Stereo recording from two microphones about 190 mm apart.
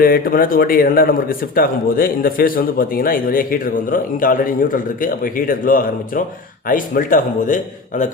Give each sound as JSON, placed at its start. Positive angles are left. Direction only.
{"t": 0.0, "sound": "a man's voice", "side_deg": 50}